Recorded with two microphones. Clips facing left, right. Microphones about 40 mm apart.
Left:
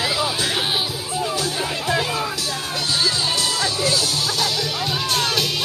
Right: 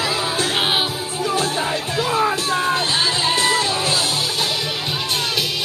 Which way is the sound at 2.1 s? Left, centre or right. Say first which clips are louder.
Right 6 dB; right.